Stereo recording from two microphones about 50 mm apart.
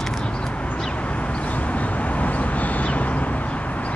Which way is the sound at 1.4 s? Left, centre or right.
Left.